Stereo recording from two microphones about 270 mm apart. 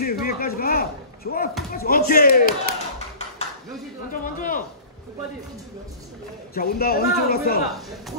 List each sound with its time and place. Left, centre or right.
0.0 s speech: left
4.1 s speech: left
6.5 s speech: left